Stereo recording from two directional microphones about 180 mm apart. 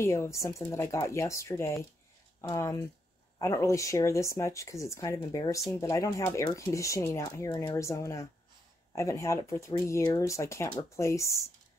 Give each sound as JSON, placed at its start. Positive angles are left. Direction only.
{"t": 0.0, "sound": "speech", "side_deg": 15}